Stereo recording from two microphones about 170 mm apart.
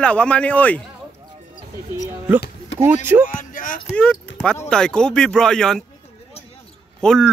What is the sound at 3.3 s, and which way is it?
Music, 50° left (ahead or behind).